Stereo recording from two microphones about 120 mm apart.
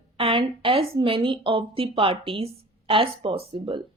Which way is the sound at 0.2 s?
45° right (ahead or behind).